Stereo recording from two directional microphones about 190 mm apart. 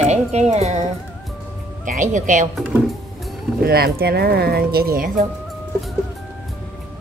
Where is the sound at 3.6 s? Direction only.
55° right (ahead or behind).